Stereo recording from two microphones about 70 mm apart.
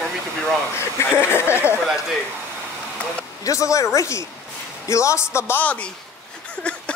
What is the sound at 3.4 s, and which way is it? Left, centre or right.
Speech, left.